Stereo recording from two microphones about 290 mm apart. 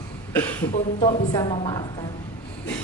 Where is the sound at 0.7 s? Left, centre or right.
Left.